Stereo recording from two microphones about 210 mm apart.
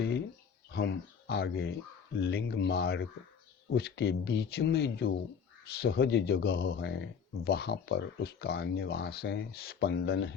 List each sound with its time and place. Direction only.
0.7 s speech: 50° left (ahead or behind)